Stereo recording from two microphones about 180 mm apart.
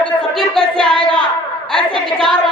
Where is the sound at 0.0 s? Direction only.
5° left (ahead or behind).